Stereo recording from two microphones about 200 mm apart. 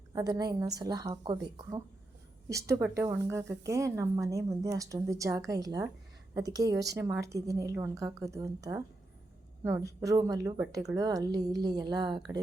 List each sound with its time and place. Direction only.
0.1 s speech: 20° right (ahead or behind)
2.5 s a woman's voice: 15° right (ahead or behind)